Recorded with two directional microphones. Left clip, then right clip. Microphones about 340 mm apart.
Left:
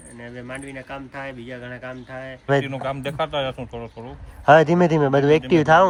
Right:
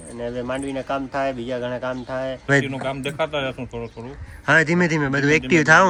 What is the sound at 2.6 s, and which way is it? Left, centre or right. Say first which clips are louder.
Speech: right 1 dB; left.